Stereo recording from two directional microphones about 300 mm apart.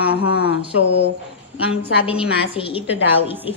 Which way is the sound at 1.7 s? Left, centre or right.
Centre.